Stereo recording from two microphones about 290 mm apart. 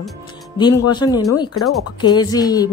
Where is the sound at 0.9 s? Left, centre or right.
Centre.